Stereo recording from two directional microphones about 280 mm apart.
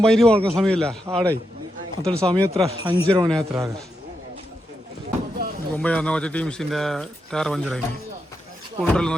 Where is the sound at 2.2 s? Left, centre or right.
Right.